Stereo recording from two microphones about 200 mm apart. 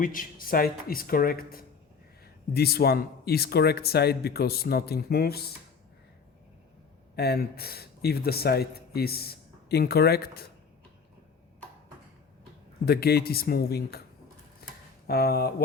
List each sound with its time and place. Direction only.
0.0 s speech: 45° left (ahead or behind)
7.2 s speech: 50° left (ahead or behind)
12.8 s speech: 50° left (ahead or behind)
14.6 s a sound: 50° left (ahead or behind)
15.0 s speech: 50° left (ahead or behind)